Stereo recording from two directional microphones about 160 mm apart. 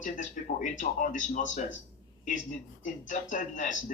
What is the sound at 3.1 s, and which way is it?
Speech, 50° left (ahead or behind).